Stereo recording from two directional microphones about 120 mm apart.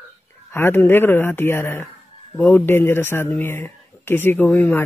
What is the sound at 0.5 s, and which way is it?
Speech, 20° left (ahead or behind).